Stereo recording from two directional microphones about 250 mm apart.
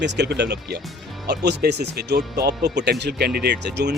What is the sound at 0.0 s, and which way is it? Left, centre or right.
Speech, right.